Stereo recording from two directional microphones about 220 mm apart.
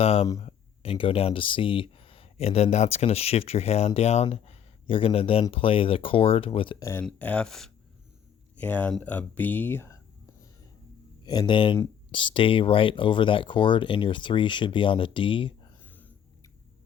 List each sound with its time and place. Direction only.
0.0 s speech: 25° left (ahead or behind); by 10.0 s 10° left (ahead or behind)
11.2 s speech: 20° left (ahead or behind)
15.8 s whispering: 10° left (ahead or behind)